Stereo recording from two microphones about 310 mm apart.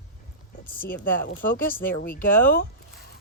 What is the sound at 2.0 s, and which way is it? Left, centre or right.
Speech, left.